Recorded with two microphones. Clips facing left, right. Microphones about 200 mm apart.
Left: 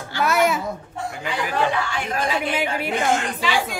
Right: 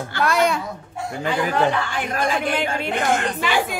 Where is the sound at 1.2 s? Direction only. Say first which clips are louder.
Right 4 dB; 50° right (ahead or behind).